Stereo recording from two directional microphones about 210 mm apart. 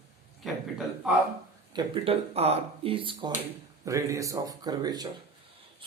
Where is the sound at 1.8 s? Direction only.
25° right (ahead or behind).